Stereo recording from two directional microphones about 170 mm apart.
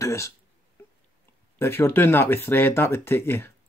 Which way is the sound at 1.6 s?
15° left (ahead or behind).